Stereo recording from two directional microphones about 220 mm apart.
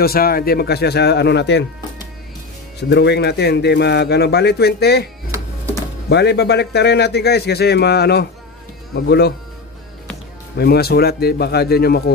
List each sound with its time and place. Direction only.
0.0 s a man's voice: 45° left (ahead or behind)
2.9 s a man's voice: 50° left (ahead or behind)
10.6 s a man's voice: 45° left (ahead or behind)